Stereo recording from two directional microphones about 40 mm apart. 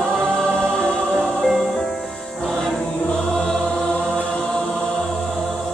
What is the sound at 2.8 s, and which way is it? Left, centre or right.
Choir, left.